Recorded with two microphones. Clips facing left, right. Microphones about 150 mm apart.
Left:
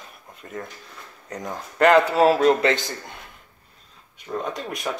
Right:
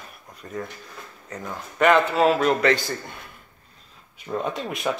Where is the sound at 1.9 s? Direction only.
35° left (ahead or behind).